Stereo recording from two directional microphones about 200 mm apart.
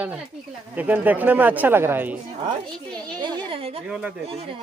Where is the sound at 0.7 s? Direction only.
10° right (ahead or behind).